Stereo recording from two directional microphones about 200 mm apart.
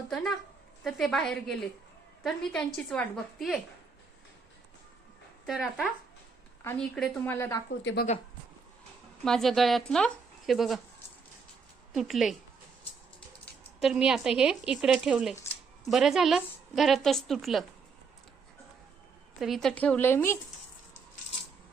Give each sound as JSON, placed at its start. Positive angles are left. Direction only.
{"t": 0.1, "sound": "a woman's voice", "side_deg": 0}
{"t": 5.5, "sound": "a woman's voice", "side_deg": 0}
{"t": 7.8, "sound": "a woman's voice", "side_deg": 65}
{"t": 9.2, "sound": "a woman's voice", "side_deg": 0}
{"t": 11.9, "sound": "a woman's voice", "side_deg": 0}
{"t": 13.7, "sound": "a woman's voice", "side_deg": 0}
{"t": 19.4, "sound": "a woman's voice", "side_deg": 0}